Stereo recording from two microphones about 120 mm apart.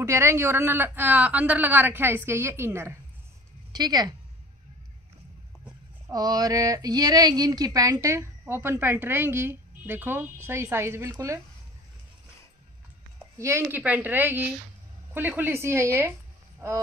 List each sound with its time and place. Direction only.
0.0 s speech: 25° right (ahead or behind)
3.7 s speech: 35° right (ahead or behind)
6.0 s speech: 30° right (ahead or behind)
13.4 s a woman's voice: 25° right (ahead or behind)